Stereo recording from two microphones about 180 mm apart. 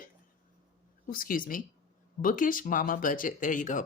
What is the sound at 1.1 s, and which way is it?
Speech, 50° left (ahead or behind).